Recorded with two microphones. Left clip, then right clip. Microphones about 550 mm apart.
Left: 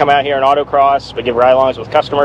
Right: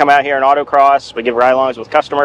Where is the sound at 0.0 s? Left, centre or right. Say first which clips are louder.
Right 1 dB; right.